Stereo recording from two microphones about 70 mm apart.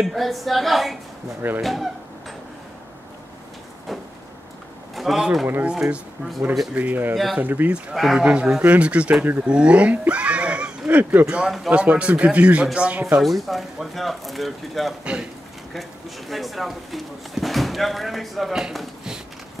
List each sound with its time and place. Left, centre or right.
0.0 s speech: centre
4.9 s pigeon: centre
5.2 s speech: centre; by 7.7 s right
7.9 s speech: centre
8.2 s speech: centre
11.4 s speech: centre
11.7 s speech: centre
13.2 s speech: centre